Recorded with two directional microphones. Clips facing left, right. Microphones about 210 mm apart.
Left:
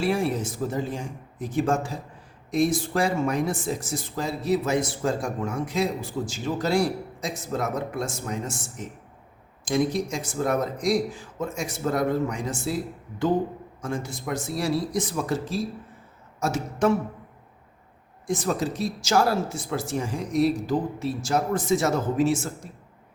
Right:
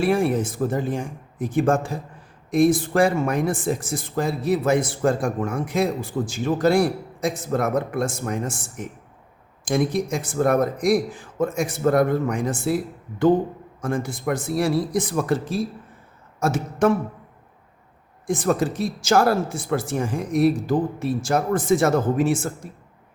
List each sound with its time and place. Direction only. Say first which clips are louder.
0.0 s speech: right 4 dB; 55° right (ahead or behind)
9.6 s speech: right 2 dB; 55° right (ahead or behind)
18.3 s speech: right 4 dB; 55° right (ahead or behind)